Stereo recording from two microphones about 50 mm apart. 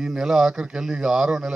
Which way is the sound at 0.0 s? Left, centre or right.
Centre.